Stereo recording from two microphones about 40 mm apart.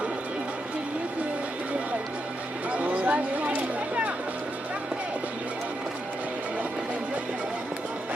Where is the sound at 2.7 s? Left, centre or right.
Right.